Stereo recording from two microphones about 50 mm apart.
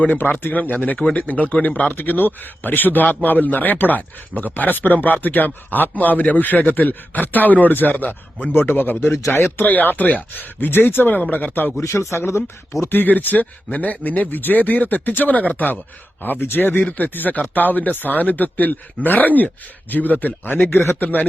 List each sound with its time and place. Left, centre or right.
0.0 s speech: left
1.9 s speech: left
11.8 s speech: left
12.9 s speech: left
20.9 s speech: left